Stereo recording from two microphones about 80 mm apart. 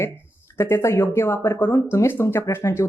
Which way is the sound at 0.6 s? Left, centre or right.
Left.